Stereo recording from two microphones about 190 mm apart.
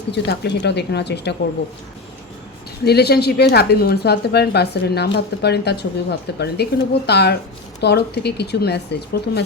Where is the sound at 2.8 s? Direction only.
55° left (ahead or behind).